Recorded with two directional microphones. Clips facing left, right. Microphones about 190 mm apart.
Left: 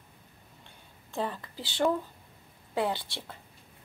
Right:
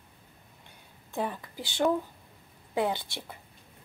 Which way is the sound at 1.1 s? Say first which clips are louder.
Right 1 dB; 15° right (ahead or behind).